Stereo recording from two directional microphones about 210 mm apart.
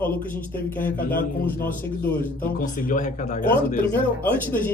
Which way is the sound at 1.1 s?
45° left (ahead or behind).